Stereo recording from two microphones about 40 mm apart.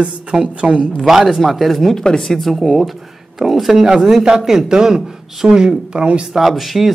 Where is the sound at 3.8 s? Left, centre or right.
Centre.